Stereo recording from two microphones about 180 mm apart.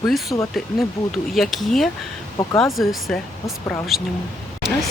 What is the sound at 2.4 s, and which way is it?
Speech, 15° left (ahead or behind).